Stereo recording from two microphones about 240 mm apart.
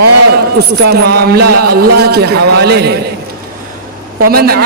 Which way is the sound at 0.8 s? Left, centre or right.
Right.